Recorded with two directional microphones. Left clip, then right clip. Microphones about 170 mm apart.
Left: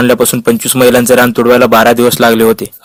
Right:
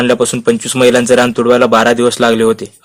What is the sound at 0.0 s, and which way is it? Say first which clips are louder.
A man's voice: left 2 dB; 40° left (ahead or behind).